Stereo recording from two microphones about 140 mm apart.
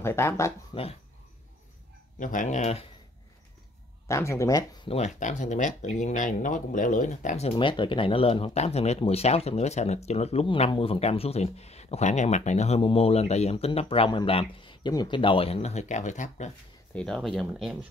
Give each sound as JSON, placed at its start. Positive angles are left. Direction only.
{"t": 0.0, "sound": "speech", "side_deg": 15}
{"t": 0.7, "sound": "speech", "side_deg": 35}
{"t": 2.1, "sound": "speech", "side_deg": 70}
{"t": 4.1, "sound": "speech", "side_deg": 20}
{"t": 4.8, "sound": "speech", "side_deg": 50}
{"t": 7.5, "sound": "speech", "side_deg": 35}
{"t": 16.9, "sound": "speech", "side_deg": 5}